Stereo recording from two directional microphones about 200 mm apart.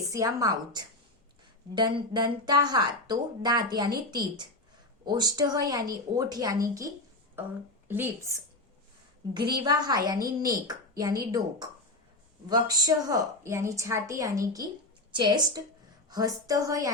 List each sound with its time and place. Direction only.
0.1 s a woman's voice: 15° right (ahead or behind)
1.7 s a woman's voice: 20° right (ahead or behind)